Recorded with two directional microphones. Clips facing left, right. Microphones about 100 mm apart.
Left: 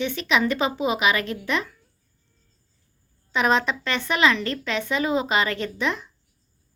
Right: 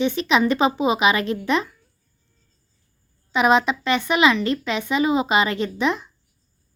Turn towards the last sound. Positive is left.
turn(degrees=-20)  # may be behind; listen again after turning